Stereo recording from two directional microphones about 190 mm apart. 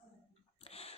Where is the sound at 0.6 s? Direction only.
30° left (ahead or behind).